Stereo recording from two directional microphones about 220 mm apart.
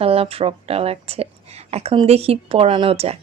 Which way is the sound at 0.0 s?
25° right (ahead or behind).